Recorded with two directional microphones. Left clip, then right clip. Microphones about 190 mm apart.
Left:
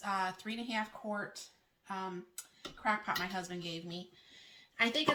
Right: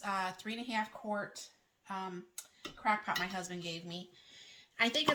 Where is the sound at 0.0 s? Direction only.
20° right (ahead or behind).